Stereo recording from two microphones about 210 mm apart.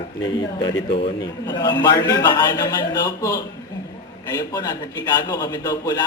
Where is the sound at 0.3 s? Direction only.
20° left (ahead or behind).